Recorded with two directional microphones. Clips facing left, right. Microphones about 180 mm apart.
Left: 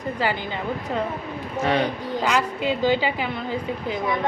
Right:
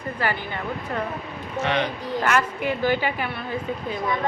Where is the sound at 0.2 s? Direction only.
15° left (ahead or behind).